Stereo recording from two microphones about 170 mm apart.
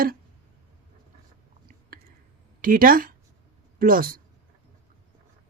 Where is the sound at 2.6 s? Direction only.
55° right (ahead or behind).